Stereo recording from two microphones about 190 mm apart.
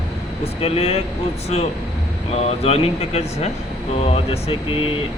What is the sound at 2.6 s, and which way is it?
Speech, 30° left (ahead or behind).